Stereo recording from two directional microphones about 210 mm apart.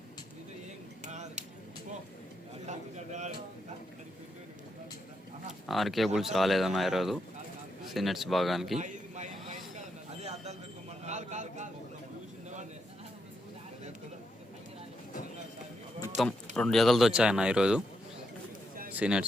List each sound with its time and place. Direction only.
1.0 s a sound: 35° right (ahead or behind)
2.6 s speech: 35° right (ahead or behind)
5.6 s a man's voice: centre (ahead or behind)
8.8 s a sound: 35° right (ahead or behind)
16.2 s a man's voice: centre (ahead or behind)
18.9 s a man's voice: 5° right (ahead or behind)